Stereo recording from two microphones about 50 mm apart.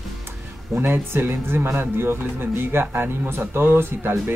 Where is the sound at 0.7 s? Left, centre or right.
Right.